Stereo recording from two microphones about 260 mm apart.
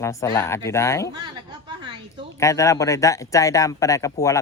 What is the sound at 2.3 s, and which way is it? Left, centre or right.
A man's voice, centre.